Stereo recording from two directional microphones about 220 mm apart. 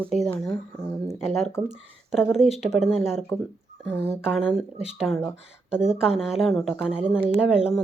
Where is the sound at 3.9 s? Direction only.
10° left (ahead or behind).